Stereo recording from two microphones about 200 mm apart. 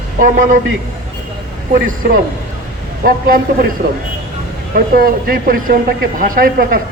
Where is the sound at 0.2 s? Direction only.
40° right (ahead or behind).